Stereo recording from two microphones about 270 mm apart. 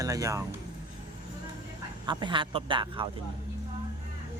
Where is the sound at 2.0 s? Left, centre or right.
Centre.